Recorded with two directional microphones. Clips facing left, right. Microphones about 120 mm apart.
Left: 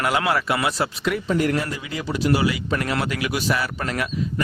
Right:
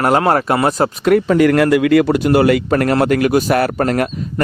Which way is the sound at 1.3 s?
85° right.